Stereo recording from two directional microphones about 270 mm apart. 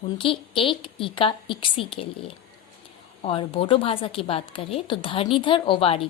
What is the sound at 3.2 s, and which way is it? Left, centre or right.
A woman's voice, centre.